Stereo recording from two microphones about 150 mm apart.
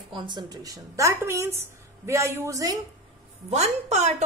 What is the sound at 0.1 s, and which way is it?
A man's voice, 30° right (ahead or behind).